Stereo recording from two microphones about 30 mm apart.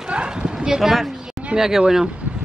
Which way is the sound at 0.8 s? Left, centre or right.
Centre.